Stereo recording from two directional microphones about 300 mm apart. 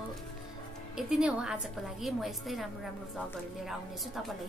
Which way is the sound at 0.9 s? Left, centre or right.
Centre.